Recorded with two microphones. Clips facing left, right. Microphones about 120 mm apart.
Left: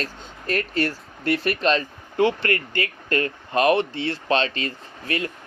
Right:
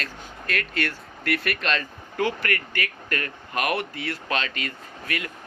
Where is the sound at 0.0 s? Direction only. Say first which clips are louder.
Left 4 dB; 30° left (ahead or behind).